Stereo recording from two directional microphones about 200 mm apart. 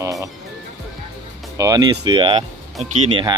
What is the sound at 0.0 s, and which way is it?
Speech, 15° right (ahead or behind).